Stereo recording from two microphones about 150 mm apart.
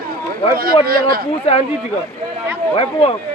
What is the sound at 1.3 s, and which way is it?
Speech, 45° left (ahead or behind).